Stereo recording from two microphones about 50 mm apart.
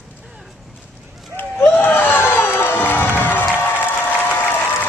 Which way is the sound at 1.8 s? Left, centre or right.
Left.